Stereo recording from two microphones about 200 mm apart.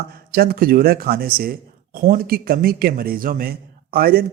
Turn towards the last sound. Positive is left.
turn(degrees=-50)  # may be behind; listen again after turning